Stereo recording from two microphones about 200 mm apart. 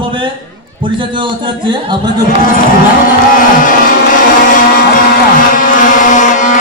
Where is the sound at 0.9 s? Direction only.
25° right (ahead or behind).